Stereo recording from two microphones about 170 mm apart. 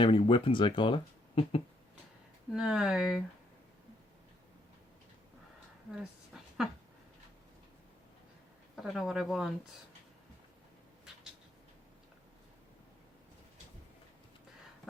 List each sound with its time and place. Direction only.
0.0 s speech: 30° left (ahead or behind)
2.5 s speech: 5° right (ahead or behind)
6.0 s a sound: centre (ahead or behind)
8.7 s speech: centre (ahead or behind)